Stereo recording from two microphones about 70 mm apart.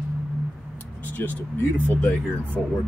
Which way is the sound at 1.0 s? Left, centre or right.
Left.